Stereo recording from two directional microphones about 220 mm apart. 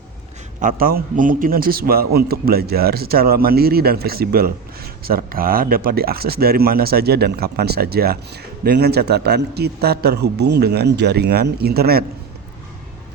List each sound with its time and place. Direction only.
0.6 s a man's voice: 40° right (ahead or behind)